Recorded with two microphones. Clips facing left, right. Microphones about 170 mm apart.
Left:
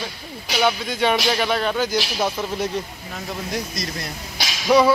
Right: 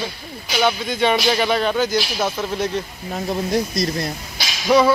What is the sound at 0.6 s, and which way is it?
Speech, 5° left (ahead or behind).